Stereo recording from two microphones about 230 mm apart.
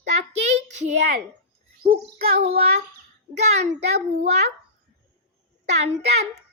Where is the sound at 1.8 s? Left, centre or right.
Right.